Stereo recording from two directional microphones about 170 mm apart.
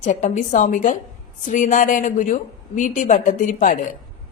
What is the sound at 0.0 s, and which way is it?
A woman's voice, 45° left (ahead or behind).